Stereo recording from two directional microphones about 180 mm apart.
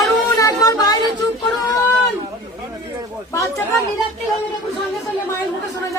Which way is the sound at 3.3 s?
15° left (ahead or behind).